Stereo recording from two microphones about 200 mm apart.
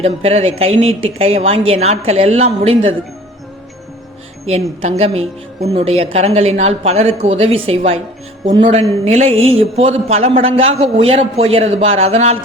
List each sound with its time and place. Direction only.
0.0 s a woman's voice: 30° right (ahead or behind)
4.8 s a woman's voice: 30° right (ahead or behind)